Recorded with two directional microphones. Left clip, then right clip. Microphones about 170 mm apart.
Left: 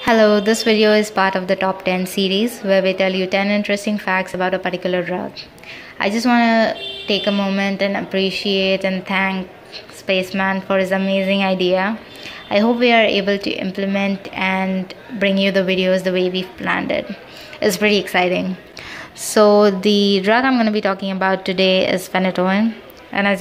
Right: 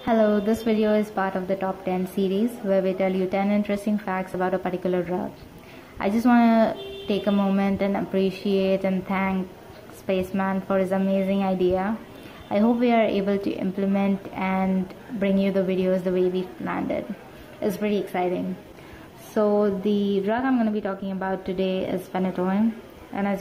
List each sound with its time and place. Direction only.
0.1 s a woman's voice: 10° left (ahead or behind)